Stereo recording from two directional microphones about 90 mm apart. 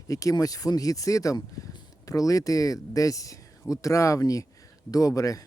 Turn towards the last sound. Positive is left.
turn(degrees=40)  # may be behind; listen again after turning